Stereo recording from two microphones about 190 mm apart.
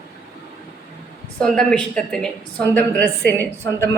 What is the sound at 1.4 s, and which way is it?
A woman's voice, 5° left (ahead or behind).